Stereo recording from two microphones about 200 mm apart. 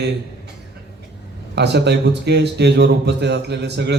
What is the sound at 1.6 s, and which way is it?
A man's voice, 55° right (ahead or behind).